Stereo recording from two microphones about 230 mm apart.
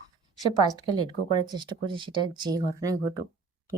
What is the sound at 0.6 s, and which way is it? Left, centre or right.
Speech, centre.